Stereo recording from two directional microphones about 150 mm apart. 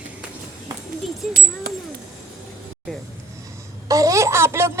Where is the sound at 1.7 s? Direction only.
90° right.